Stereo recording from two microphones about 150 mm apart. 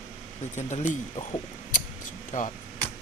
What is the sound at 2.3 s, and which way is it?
Speech, 65° left (ahead or behind).